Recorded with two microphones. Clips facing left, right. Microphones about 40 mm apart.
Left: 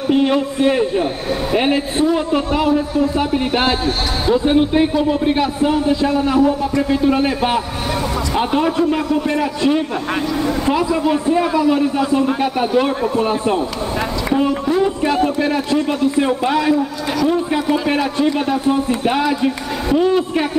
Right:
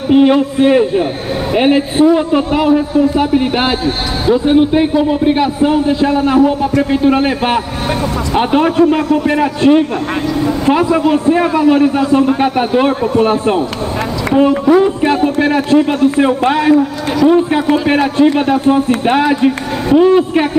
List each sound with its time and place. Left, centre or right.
0.1 s a man's voice: centre
6.1 s a man's voice: right
9.6 s a man's voice: right